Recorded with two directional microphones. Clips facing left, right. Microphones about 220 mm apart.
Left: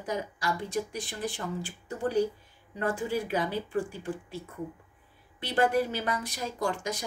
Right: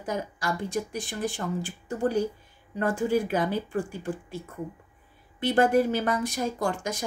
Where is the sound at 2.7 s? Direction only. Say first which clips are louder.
Right 5 dB; 50° right (ahead or behind).